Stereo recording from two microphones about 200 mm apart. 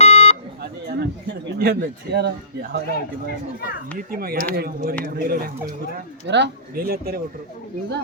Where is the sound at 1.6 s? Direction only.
55° right (ahead or behind).